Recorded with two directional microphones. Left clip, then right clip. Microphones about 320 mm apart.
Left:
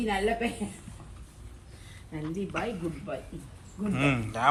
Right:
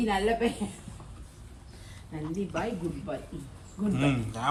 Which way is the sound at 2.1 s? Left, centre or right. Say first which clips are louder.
Even; centre.